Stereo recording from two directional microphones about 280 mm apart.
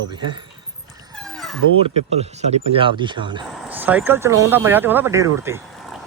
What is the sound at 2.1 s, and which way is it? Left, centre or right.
Speech, right.